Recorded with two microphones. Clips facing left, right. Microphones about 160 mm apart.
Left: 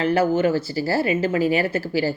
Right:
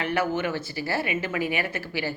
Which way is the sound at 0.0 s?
35° left (ahead or behind).